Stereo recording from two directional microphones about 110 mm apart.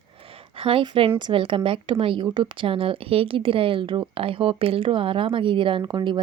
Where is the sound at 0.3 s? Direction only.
55° right (ahead or behind).